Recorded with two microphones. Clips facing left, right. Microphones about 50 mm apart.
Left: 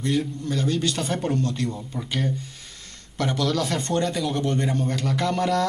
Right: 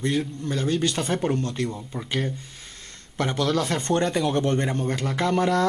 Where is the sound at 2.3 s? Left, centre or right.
Right.